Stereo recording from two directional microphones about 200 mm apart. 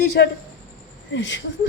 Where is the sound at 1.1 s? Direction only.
65° left (ahead or behind).